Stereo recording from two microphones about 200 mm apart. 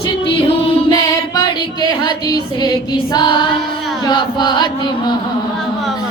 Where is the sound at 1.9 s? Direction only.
20° left (ahead or behind).